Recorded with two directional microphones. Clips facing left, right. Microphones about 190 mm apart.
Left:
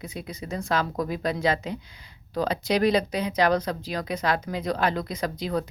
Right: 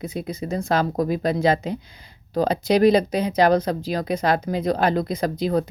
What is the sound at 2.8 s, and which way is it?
Speech, 45° right (ahead or behind).